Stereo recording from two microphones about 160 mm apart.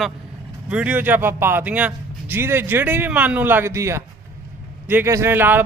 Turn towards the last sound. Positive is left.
turn(degrees=-10)  # may be behind; listen again after turning